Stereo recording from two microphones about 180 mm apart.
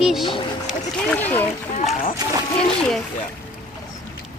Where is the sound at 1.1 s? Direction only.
10° left (ahead or behind).